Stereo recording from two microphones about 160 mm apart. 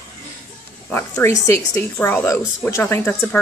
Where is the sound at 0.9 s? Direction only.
15° left (ahead or behind).